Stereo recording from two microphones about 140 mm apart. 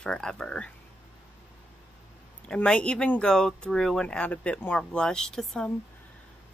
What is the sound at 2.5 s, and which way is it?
Speech, 10° left (ahead or behind).